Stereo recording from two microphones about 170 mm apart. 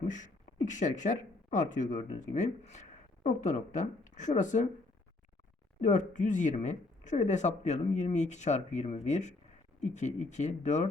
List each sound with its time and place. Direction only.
0.0 s speech: 45° left (ahead or behind)
5.8 s speech: 45° left (ahead or behind)